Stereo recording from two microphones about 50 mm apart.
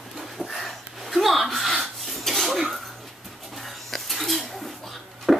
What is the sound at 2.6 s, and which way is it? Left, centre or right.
Dog, centre.